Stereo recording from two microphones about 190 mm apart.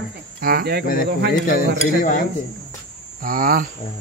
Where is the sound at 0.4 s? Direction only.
50° right (ahead or behind).